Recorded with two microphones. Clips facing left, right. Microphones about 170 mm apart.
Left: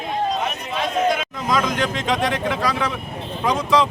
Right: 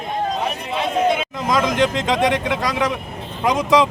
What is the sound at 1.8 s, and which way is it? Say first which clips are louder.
Speech: right 4 dB; 15° right (ahead or behind).